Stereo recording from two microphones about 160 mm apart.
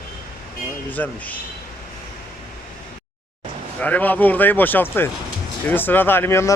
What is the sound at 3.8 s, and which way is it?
Speech, 10° left (ahead or behind).